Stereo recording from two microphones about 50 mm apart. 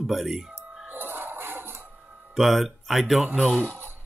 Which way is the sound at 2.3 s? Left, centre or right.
Centre.